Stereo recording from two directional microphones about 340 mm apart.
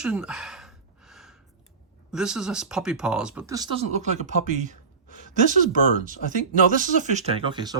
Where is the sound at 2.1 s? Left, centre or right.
Centre.